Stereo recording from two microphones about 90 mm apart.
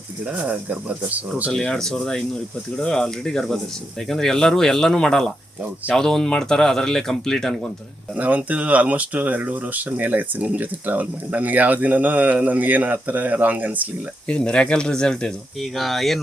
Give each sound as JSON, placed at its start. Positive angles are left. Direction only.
{"t": 0.3, "sound": "speech", "side_deg": -15}
{"t": 1.5, "sound": "speech", "side_deg": 5}
{"t": 8.1, "sound": "speech", "side_deg": -15}
{"t": 14.3, "sound": "speech", "side_deg": 10}